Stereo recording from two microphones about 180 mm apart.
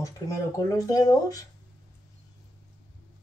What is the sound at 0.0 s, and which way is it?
Speech, 20° left (ahead or behind).